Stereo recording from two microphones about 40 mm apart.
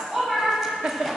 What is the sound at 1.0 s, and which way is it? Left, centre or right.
Music, centre.